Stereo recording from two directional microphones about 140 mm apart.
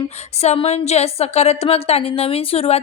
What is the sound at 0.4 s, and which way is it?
A woman's voice, 50° left (ahead or behind).